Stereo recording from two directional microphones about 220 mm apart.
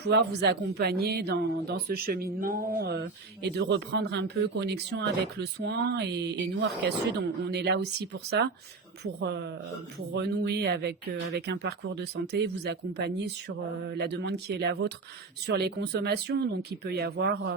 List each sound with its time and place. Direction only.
0.0 s speech: 50° right (ahead or behind)